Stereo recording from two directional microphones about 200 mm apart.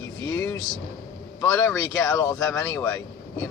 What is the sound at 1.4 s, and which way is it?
Speech, 10° left (ahead or behind).